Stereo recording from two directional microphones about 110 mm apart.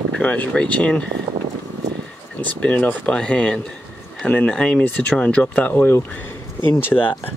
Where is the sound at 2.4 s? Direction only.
15° left (ahead or behind).